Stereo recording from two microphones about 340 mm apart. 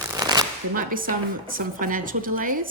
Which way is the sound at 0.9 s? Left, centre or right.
Right.